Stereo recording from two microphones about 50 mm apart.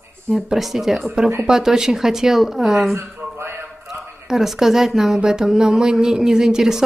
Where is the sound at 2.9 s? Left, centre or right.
Right.